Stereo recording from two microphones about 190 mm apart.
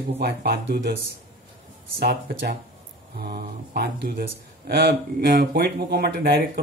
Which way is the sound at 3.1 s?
55° right (ahead or behind).